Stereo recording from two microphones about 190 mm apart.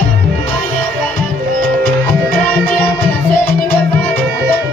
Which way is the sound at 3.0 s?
55° left (ahead or behind).